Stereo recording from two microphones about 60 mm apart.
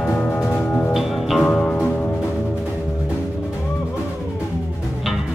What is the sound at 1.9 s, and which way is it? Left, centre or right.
Music, centre.